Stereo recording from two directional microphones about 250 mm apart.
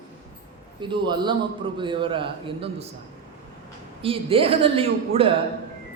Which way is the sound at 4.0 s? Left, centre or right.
Right.